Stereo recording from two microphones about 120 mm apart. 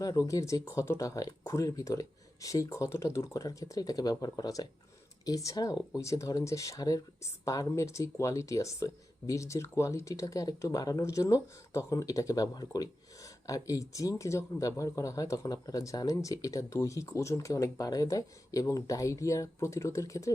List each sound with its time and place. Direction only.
0.0 s speech: 30° left (ahead or behind)